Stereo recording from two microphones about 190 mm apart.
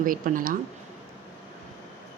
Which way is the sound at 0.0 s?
45° right (ahead or behind).